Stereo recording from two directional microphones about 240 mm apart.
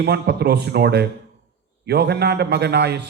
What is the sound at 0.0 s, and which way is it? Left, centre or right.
A man's voice, right.